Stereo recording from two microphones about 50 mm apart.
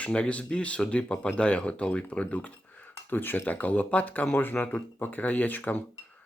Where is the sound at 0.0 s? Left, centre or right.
Left.